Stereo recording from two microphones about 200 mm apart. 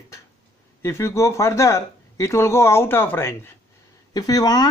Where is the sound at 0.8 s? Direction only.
15° left (ahead or behind).